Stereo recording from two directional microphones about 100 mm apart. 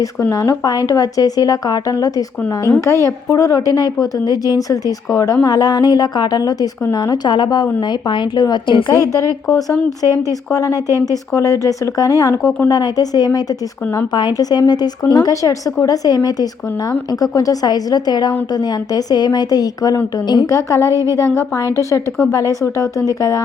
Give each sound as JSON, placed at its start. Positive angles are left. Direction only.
{"t": 0.0, "sound": "a woman's voice", "side_deg": 30}
{"t": 8.9, "sound": "a woman's voice", "side_deg": 35}